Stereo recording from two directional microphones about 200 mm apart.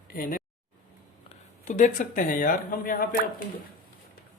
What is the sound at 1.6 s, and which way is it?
Speech, 40° left (ahead or behind).